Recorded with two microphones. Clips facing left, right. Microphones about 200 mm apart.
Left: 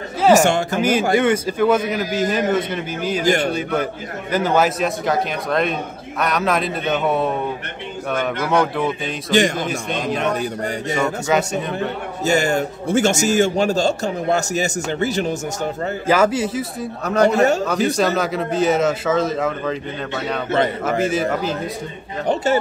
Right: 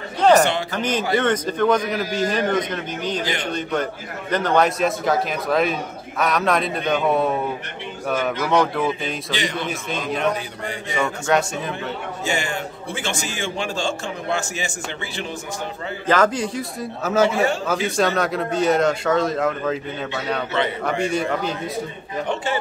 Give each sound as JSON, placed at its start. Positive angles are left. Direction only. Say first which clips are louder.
{"t": 0.4, "sound": "a man's voice", "louder": "left 3 dB", "side_deg": 45}
{"t": 0.7, "sound": "a man's voice", "louder": "left 3 dB", "side_deg": 10}
{"t": 9.3, "sound": "a man's voice", "louder": "left 11 dB", "side_deg": 45}
{"t": 9.7, "sound": "a man's voice", "louder": "left 3 dB", "side_deg": 0}
{"t": 12.3, "sound": "a man's voice", "louder": "left 8 dB", "side_deg": 40}
{"t": 16.1, "sound": "a man's voice", "louder": "left 2 dB", "side_deg": 10}
{"t": 17.4, "sound": "a man's voice", "louder": "left 5 dB", "side_deg": 40}
{"t": 17.8, "sound": "a man's voice", "louder": "left 1 dB", "side_deg": 0}
{"t": 21.0, "sound": "a man's voice", "louder": "left 2 dB", "side_deg": 0}
{"t": 22.2, "sound": "a man's voice", "louder": "left 6 dB", "side_deg": 40}